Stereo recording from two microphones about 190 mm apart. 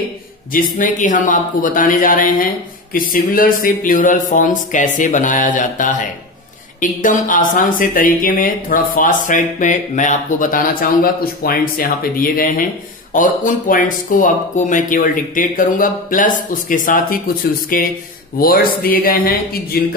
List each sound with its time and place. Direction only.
0.5 s speech: 45° left (ahead or behind)